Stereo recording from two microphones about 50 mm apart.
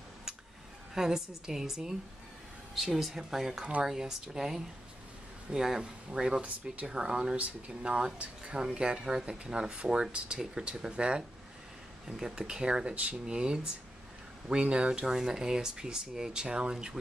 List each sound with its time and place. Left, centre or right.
0.9 s speech: centre
6.4 s speech: right
6.9 s speech: centre
7.3 s speech: right